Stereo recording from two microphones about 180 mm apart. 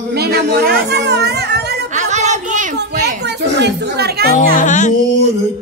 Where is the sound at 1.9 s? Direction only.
40° right (ahead or behind).